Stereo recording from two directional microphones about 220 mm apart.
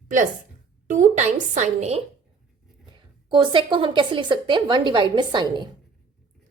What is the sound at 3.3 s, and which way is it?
A woman's voice, 20° right (ahead or behind).